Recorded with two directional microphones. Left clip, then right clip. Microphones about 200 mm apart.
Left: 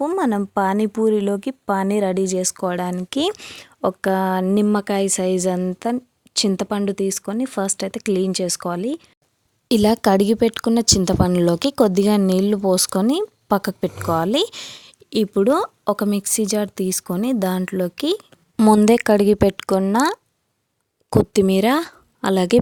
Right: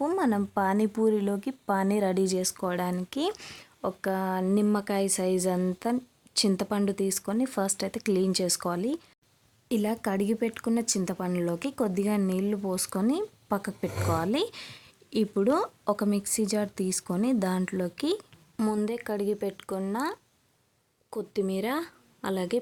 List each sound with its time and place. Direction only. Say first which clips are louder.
0.0 s speech: left 7 dB; 30° left (ahead or behind)
9.6 s speech: left 13 dB; 45° left (ahead or behind)
18.9 s speech: left 15 dB; 55° left (ahead or behind)